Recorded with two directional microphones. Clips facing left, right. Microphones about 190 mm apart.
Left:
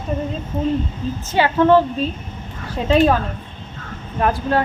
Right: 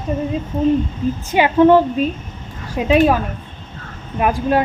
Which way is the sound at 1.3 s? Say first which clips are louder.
Right 3 dB; 15° right (ahead or behind).